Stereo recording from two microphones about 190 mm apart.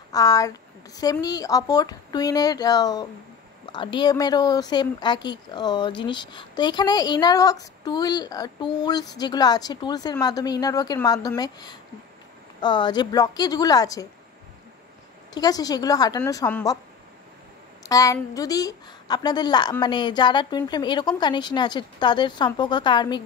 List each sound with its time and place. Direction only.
0.1 s speech: 20° left (ahead or behind)
15.3 s a woman's voice: 20° left (ahead or behind)
17.8 s speech: 15° left (ahead or behind)